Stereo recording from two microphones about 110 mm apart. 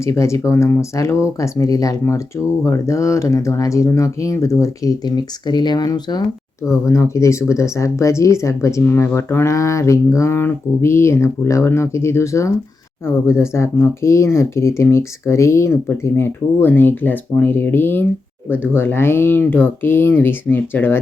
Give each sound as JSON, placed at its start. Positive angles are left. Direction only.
{"t": 0.0, "sound": "speech", "side_deg": 25}
{"t": 6.7, "sound": "speech", "side_deg": 30}